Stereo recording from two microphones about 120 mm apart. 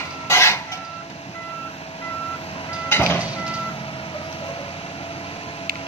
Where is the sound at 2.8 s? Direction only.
20° left (ahead or behind).